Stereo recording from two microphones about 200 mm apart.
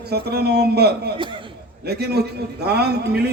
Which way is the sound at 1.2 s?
25° right (ahead or behind).